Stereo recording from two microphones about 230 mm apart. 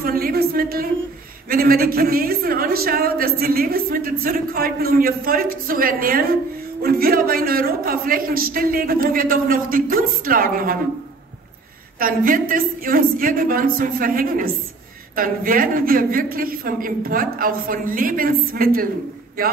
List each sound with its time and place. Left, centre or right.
0.0 s a sound: right
1.5 s speech: right
12.0 s speech: right